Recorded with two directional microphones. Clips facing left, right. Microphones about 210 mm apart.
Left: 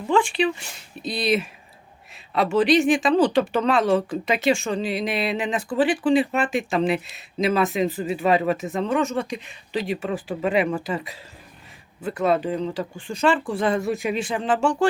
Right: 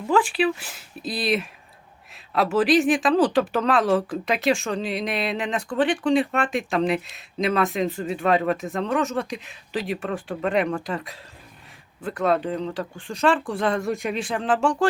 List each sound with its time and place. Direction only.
0.1 s speech: 5° right (ahead or behind)